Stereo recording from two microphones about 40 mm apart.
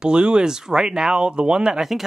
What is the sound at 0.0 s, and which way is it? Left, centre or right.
Speech, right.